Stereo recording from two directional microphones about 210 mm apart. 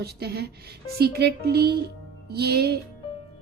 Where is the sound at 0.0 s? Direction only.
50° right (ahead or behind).